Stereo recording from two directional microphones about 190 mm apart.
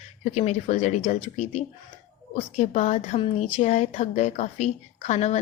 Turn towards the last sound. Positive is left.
turn(degrees=35)  # may be behind; listen again after turning